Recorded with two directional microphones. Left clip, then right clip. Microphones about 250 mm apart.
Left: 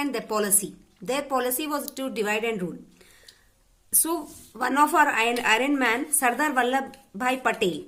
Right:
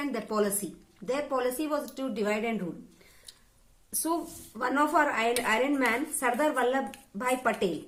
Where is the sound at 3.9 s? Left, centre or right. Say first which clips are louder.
Left 2 dB; left.